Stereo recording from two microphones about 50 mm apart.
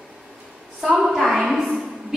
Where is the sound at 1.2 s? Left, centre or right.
Centre.